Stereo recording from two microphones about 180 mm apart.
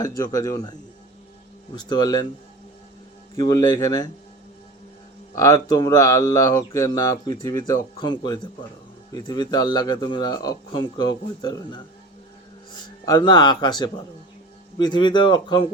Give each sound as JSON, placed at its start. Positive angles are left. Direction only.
{"t": 0.0, "sound": "speech", "side_deg": 20}
{"t": 3.3, "sound": "speech", "side_deg": 20}
{"t": 5.3, "sound": "speech", "side_deg": 20}
{"t": 12.8, "sound": "speech", "side_deg": 25}